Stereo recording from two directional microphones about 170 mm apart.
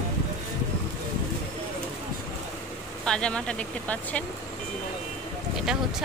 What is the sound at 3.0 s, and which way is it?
Speech, 5° left (ahead or behind).